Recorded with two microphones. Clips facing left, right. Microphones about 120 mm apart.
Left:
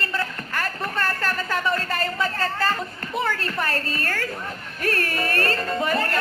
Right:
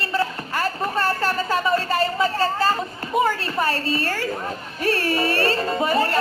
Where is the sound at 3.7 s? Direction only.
50° left (ahead or behind).